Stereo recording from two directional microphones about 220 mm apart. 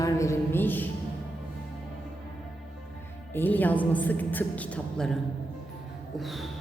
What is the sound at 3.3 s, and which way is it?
A woman's voice, 10° left (ahead or behind).